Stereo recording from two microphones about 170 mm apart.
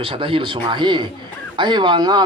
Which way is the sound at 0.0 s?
30° right (ahead or behind).